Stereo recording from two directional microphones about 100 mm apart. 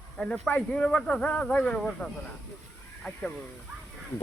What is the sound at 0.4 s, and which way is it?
Speech, 10° left (ahead or behind).